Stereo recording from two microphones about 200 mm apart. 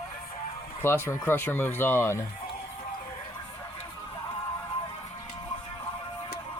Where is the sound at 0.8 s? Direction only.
10° left (ahead or behind).